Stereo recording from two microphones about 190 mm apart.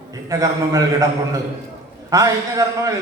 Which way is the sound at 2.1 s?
15° right (ahead or behind).